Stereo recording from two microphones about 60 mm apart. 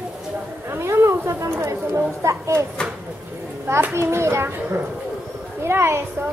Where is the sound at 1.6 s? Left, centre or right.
Right.